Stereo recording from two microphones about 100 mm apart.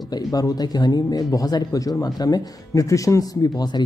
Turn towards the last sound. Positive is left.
turn(degrees=45)  # may be behind; listen again after turning